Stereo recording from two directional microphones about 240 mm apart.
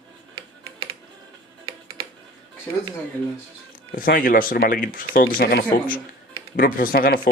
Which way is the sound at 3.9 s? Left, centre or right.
Left.